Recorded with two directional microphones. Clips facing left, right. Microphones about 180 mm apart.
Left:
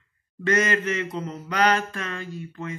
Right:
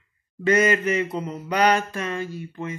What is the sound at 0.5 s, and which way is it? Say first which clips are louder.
Speech: right 4 dB; 10° right (ahead or behind).